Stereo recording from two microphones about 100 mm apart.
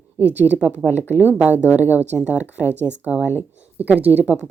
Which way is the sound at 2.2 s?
25° left (ahead or behind).